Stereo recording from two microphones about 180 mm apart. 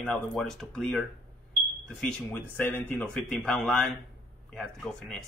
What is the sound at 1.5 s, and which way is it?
Smoke detector, 5° left (ahead or behind).